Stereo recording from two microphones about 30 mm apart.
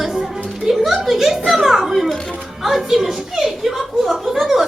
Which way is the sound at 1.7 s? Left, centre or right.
Centre.